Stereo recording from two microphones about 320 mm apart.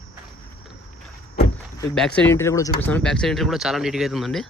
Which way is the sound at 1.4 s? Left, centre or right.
Centre.